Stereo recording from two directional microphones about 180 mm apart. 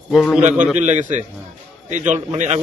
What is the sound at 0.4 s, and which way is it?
A man's voice, 40° right (ahead or behind).